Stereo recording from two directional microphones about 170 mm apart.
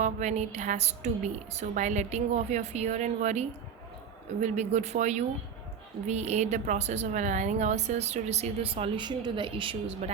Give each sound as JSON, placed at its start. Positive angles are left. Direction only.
{"t": 0.0, "sound": "a woman's voice", "side_deg": -40}